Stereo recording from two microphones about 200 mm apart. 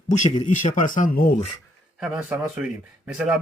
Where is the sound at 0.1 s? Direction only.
35° left (ahead or behind).